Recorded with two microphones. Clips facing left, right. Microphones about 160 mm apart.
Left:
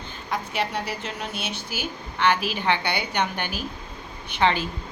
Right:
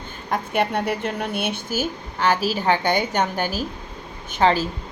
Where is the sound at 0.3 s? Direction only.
55° right (ahead or behind).